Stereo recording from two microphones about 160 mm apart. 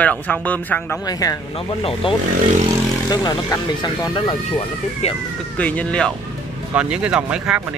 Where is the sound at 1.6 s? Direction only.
35° left (ahead or behind).